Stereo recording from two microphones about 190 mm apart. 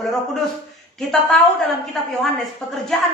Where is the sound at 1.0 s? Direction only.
Centre (ahead or behind).